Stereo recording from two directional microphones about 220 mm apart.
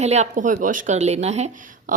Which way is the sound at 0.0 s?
30° right (ahead or behind).